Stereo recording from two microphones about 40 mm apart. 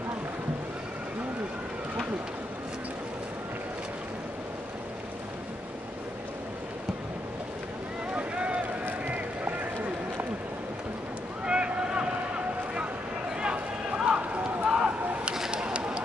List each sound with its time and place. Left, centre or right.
8.1 s boat: right
9.0 s run: right
11.4 s boat: right
13.4 s a sound: right